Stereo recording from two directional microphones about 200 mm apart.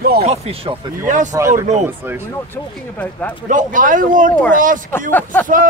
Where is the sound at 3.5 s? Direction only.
40° right (ahead or behind).